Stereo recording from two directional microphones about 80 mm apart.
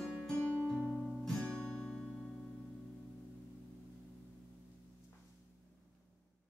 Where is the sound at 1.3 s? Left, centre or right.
Centre.